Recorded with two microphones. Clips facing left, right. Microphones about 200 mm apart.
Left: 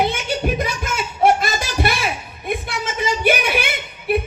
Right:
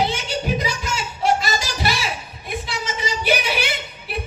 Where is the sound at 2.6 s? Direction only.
55° left (ahead or behind).